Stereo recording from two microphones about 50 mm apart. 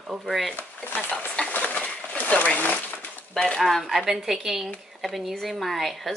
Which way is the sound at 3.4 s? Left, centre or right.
Centre.